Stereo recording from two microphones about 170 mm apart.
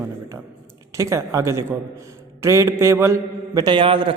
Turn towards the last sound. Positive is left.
turn(degrees=-30)  # may be behind; listen again after turning